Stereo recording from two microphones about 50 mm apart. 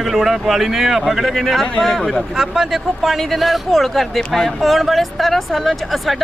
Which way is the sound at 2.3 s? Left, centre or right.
Centre.